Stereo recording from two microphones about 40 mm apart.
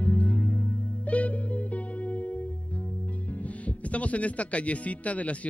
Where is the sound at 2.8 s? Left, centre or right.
Left.